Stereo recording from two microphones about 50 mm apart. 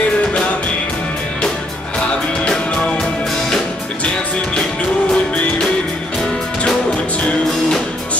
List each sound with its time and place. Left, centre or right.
2.0 s music: left
5.1 s music: left